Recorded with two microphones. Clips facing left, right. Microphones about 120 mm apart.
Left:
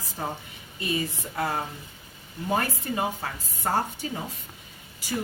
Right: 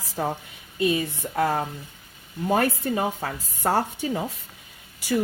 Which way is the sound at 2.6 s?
60° right (ahead or behind).